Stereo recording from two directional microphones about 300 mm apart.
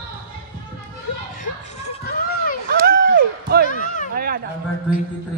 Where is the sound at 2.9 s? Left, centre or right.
Right.